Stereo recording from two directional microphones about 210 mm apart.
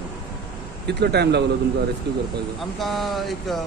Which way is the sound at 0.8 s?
50° right (ahead or behind).